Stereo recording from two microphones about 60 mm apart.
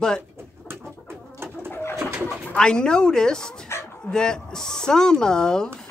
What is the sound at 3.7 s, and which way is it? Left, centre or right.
Dog, left.